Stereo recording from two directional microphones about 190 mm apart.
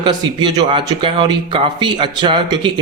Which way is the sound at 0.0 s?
25° right (ahead or behind).